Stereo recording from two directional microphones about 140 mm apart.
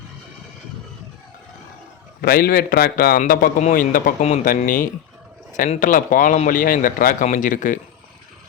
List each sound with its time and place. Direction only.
2.2 s a man's voice: 90° left
5.5 s speech: 50° left (ahead or behind)
5.8 s speech: 75° left (ahead or behind)